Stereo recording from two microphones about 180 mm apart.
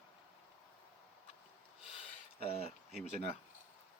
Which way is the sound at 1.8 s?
30° left (ahead or behind).